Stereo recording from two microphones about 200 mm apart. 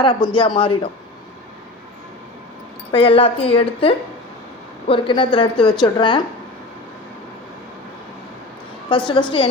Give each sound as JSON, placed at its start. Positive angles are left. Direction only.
{"t": 0.0, "sound": "a woman's voice", "side_deg": 25}
{"t": 2.9, "sound": "a woman's voice", "side_deg": 25}
{"t": 9.0, "sound": "a woman's voice", "side_deg": 25}